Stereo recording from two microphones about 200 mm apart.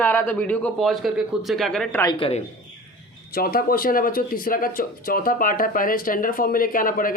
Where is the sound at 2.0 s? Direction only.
25° left (ahead or behind).